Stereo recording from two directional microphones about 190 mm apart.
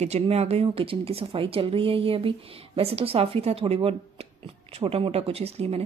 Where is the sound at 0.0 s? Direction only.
35° right (ahead or behind).